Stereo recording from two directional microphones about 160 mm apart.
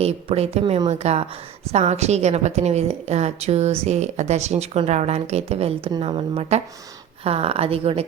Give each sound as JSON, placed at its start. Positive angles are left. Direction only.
{"t": 0.0, "sound": "a woman's voice", "side_deg": -40}